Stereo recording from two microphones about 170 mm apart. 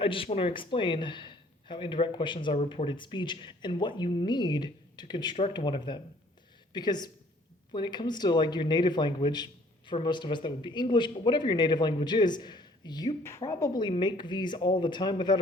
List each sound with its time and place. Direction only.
0.0 s a man's voice: 30° left (ahead or behind)